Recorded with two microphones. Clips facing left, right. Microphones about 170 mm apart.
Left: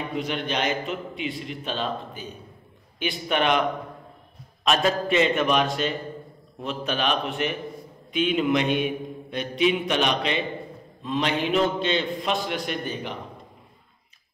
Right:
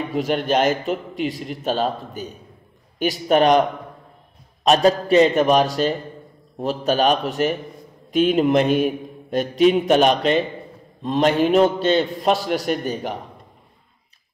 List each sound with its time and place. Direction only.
0.3 s a man's voice: 45° right (ahead or behind)
4.6 s a man's voice: 35° right (ahead or behind)